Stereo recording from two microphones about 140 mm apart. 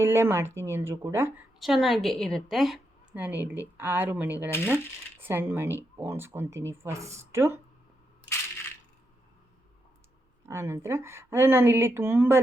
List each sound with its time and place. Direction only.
0.0 s speech: 15° right (ahead or behind)
1.5 s a woman's voice: centre (ahead or behind)
3.2 s speech: 10° right (ahead or behind)
10.5 s speech: 20° right (ahead or behind)